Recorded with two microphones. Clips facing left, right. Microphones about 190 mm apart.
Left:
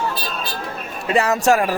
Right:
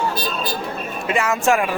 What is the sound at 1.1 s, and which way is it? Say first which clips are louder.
Speech: left 2 dB; 35° left (ahead or behind).